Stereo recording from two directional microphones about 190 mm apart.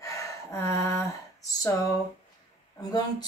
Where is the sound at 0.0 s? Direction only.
15° left (ahead or behind).